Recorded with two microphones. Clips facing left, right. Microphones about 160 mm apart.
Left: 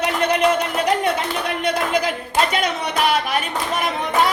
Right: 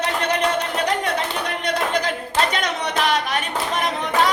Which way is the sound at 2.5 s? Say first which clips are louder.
Left 2 dB; 10° left (ahead or behind).